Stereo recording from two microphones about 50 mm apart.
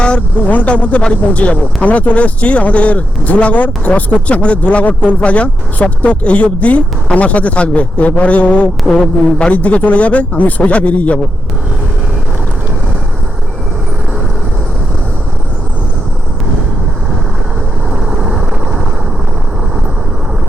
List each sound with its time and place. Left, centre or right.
0.4 s speech: left
17.9 s vehicle: centre